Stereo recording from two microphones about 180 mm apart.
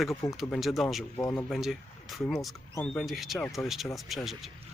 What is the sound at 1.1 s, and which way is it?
Speech, 20° left (ahead or behind).